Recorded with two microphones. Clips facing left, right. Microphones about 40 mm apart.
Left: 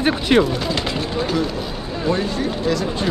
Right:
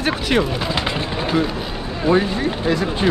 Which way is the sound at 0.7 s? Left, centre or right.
Right.